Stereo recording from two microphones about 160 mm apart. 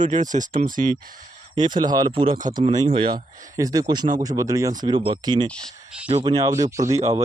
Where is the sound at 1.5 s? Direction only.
25° right (ahead or behind).